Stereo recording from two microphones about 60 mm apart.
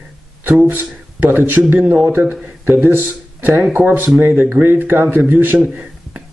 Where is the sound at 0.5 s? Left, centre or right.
Right.